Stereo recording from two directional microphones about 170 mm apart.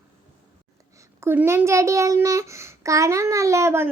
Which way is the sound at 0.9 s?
15° right (ahead or behind).